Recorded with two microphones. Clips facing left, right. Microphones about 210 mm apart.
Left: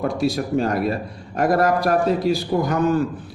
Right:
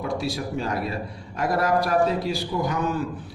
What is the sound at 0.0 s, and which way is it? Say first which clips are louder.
A man's voice: left 6 dB; 45° left (ahead or behind).